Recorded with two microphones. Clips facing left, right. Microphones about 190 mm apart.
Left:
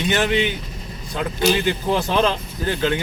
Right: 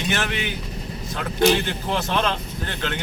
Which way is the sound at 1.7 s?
10° left (ahead or behind).